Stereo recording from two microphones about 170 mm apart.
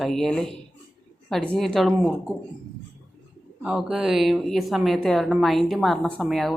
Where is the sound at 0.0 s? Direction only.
Centre (ahead or behind).